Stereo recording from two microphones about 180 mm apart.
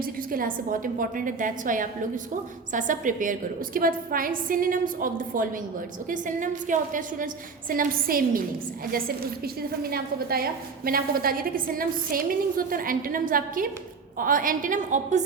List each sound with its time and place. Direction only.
0.0 s a woman's voice: 50° right (ahead or behind)